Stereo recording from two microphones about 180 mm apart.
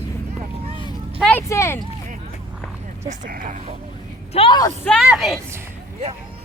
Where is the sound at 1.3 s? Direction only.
15° left (ahead or behind).